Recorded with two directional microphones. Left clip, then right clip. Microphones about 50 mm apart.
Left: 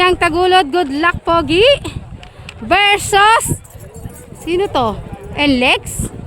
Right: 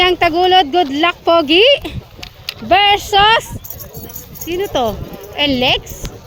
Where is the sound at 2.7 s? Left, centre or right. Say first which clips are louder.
Right 1 dB; left.